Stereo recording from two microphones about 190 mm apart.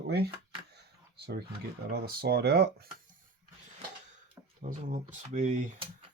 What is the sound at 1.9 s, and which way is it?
Speech, 55° right (ahead or behind).